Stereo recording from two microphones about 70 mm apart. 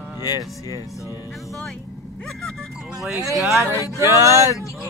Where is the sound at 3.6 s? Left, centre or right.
Right.